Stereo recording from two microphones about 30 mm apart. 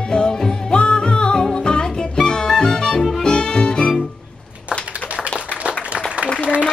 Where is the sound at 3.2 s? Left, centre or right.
Left.